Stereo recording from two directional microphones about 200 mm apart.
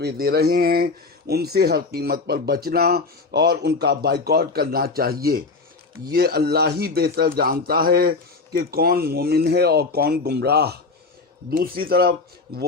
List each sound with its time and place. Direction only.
0.0 s speech: 50° right (ahead or behind)